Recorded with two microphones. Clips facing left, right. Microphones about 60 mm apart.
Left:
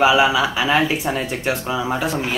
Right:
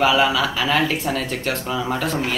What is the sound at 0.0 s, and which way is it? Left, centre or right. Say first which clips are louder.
Speech: left 2 dB; centre.